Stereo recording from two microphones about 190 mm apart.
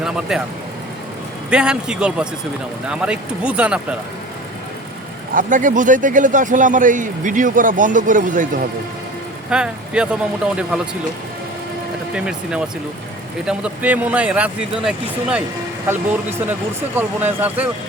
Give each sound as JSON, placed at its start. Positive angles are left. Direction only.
{"t": 0.0, "sound": "speech", "side_deg": -5}
{"t": 1.5, "sound": "speech", "side_deg": -5}
{"t": 5.3, "sound": "speech", "side_deg": -45}
{"t": 9.5, "sound": "speech", "side_deg": -5}
{"t": 12.1, "sound": "speech", "side_deg": -5}
{"t": 16.4, "sound": "speech", "side_deg": -10}